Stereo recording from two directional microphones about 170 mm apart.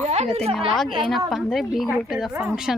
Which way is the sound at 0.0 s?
40° right (ahead or behind).